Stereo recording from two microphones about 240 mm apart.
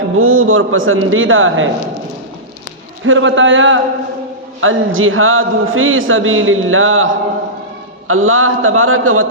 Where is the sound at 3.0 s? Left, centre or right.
Right.